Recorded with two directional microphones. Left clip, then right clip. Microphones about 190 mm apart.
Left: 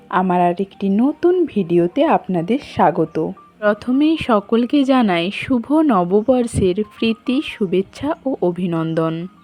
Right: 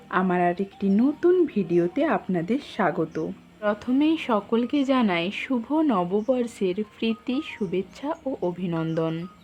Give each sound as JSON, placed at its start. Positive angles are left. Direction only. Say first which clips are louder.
{"t": 0.1, "sound": "a woman's voice", "louder": "left 7 dB", "side_deg": 25}